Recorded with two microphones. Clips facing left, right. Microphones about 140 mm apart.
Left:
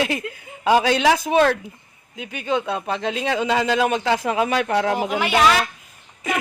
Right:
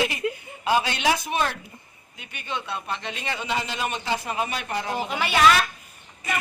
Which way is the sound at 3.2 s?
90° left.